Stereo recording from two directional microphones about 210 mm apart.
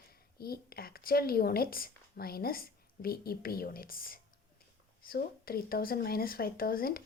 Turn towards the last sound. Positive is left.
turn(degrees=45)  # may be behind; listen again after turning